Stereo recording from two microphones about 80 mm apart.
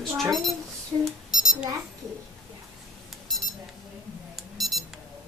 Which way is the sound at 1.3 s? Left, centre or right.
Centre.